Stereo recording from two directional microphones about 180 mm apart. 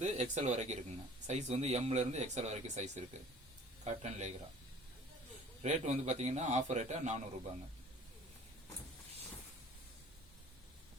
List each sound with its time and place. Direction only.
0.0 s speech: 40° right (ahead or behind)
5.6 s speech: 40° right (ahead or behind)